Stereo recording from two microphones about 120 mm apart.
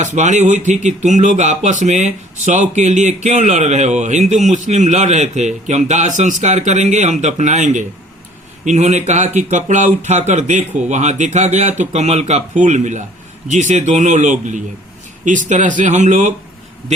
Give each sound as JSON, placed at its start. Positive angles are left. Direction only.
{"t": 0.0, "sound": "speech", "side_deg": -85}